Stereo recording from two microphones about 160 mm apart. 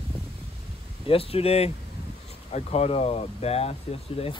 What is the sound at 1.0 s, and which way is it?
Speech, 35° left (ahead or behind).